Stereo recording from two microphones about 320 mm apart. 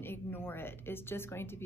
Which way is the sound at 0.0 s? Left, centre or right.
Centre.